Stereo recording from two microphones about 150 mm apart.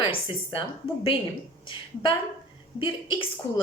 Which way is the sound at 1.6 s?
35° left (ahead or behind).